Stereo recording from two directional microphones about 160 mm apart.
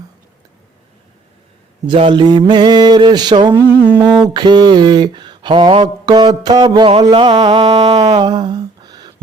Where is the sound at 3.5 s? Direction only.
10° right (ahead or behind).